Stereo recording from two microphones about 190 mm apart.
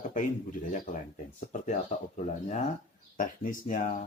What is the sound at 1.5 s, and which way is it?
Speech, 40° left (ahead or behind).